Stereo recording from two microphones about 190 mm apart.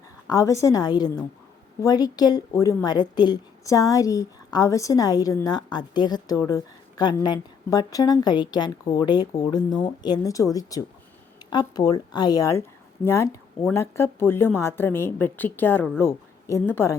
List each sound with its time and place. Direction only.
0.3 s a woman's voice: 15° left (ahead or behind)